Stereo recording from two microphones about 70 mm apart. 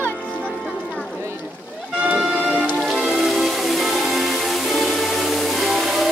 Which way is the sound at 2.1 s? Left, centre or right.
Right.